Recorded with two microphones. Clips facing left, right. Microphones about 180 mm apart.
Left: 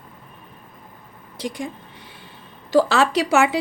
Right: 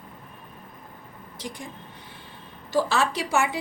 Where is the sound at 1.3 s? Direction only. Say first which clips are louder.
Left 9 dB; 80° left.